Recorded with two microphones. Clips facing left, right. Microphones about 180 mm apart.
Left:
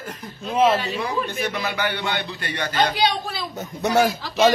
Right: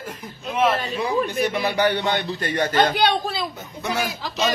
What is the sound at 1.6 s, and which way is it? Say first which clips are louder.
Speech: right 5 dB; 40° right (ahead or behind).